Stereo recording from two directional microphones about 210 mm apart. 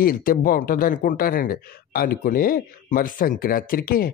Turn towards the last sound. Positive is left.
turn(degrees=45)  # may be behind; listen again after turning